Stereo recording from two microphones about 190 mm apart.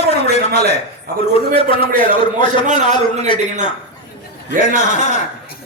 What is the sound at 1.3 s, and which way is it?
A man's voice, 30° left (ahead or behind).